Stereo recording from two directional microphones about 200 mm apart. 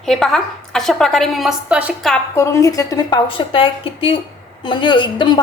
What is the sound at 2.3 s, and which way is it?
A woman's voice, 15° left (ahead or behind).